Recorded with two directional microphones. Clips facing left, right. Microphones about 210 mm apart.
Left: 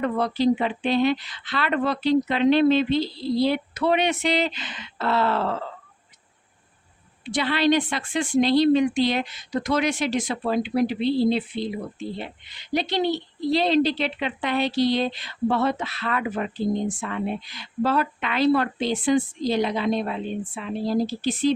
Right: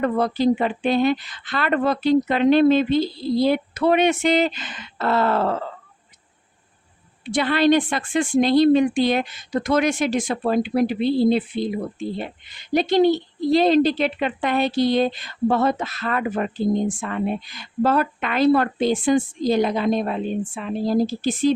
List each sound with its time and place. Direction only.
0.0 s a woman's voice: 50° right (ahead or behind)
7.3 s a woman's voice: 50° right (ahead or behind)